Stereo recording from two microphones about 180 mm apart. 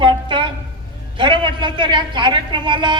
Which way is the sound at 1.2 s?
25° right (ahead or behind).